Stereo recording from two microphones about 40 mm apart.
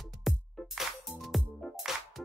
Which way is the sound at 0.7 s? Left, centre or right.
Centre.